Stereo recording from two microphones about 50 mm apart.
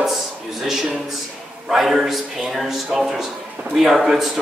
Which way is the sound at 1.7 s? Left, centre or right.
Centre.